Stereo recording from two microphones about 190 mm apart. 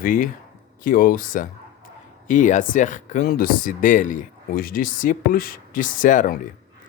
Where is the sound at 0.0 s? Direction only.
45° left (ahead or behind).